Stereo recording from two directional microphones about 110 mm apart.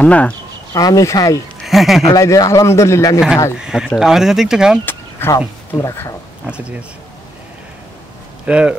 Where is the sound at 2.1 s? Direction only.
30° left (ahead or behind).